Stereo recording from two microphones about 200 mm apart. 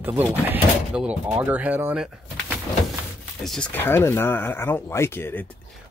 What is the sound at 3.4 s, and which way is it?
Speech, 5° left (ahead or behind).